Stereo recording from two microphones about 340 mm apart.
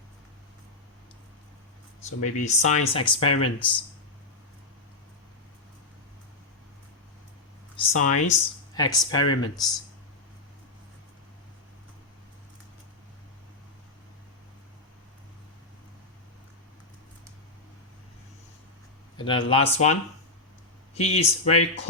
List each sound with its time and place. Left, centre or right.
2.2 s speech: left
7.9 s speech: left
8.3 s speech: centre
19.1 s speech: centre